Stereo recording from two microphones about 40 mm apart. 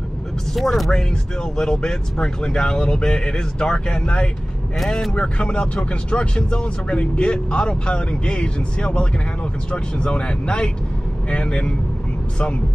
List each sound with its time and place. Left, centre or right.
0.6 s speech: centre
0.9 s speech: centre
4.7 s speech: centre
5.1 s speech: left